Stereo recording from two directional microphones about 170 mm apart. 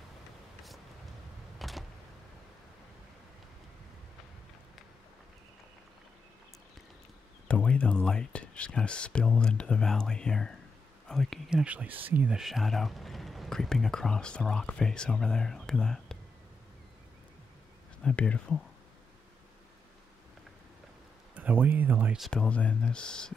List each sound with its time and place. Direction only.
1.6 s a sound: centre (ahead or behind)
7.4 s speech: 5° left (ahead or behind)
18.0 s speech: 5° left (ahead or behind)
21.4 s speech: 10° right (ahead or behind)